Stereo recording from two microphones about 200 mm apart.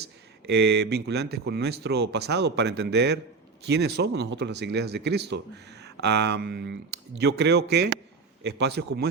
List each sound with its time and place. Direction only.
0.0 s speech: 55° right (ahead or behind)